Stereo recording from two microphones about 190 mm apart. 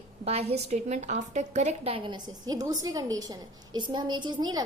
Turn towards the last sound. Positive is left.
turn(degrees=-20)  # may be behind; listen again after turning